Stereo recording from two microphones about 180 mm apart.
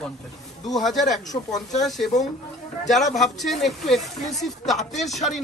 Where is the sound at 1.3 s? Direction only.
30° left (ahead or behind).